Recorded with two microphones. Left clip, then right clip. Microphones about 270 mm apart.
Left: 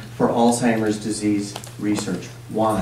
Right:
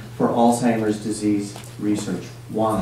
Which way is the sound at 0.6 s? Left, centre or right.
Centre.